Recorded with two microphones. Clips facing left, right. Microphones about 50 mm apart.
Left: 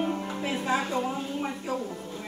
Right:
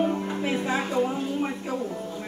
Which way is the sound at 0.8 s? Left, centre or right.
Centre.